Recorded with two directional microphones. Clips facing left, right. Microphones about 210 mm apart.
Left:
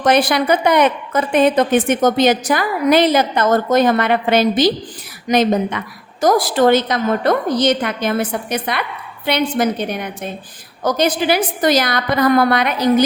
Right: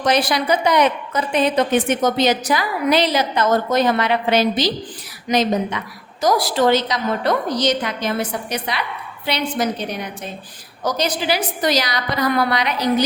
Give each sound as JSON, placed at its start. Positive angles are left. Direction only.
{"t": 0.0, "sound": "a woman's voice", "side_deg": 55}
{"t": 10.8, "sound": "a woman's voice", "side_deg": 55}